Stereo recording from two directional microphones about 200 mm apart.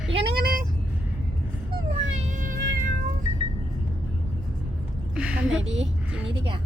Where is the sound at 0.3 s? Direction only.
50° right (ahead or behind).